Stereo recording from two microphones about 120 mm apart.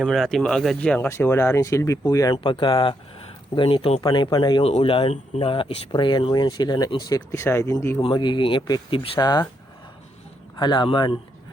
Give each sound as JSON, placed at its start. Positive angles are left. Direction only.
{"t": 0.0, "sound": "speech", "side_deg": 0}
{"t": 0.8, "sound": "speech", "side_deg": 15}
{"t": 2.3, "sound": "speech", "side_deg": 45}
{"t": 4.0, "sound": "speech", "side_deg": 35}
{"t": 4.6, "sound": "speech", "side_deg": 55}
{"t": 8.0, "sound": "speech", "side_deg": 40}
{"t": 10.6, "sound": "speech", "side_deg": 40}